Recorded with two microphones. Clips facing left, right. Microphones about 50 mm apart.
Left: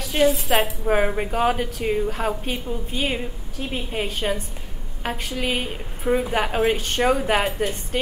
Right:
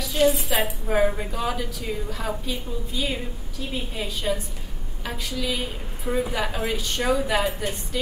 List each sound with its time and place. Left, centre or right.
0.2 s a woman's voice: left
0.5 s a woman's voice: left